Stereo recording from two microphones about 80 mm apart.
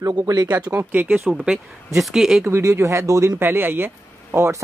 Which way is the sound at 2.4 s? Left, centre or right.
Right.